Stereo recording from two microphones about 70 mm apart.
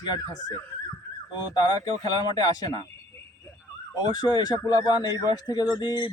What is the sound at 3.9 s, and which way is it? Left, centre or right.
Speech, left.